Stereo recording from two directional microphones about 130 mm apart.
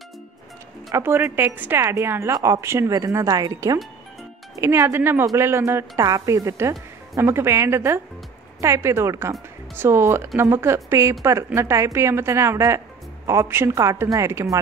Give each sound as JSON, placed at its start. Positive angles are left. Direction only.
{"t": 0.9, "sound": "a woman's voice", "side_deg": -15}